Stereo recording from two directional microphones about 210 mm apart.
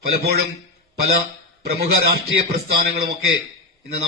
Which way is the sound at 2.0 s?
50° right (ahead or behind).